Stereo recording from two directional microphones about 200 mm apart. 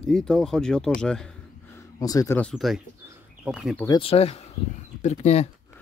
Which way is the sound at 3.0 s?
5° right (ahead or behind).